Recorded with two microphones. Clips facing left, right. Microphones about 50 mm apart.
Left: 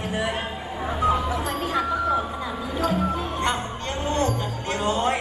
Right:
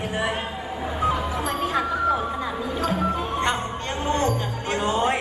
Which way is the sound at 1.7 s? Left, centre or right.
Centre.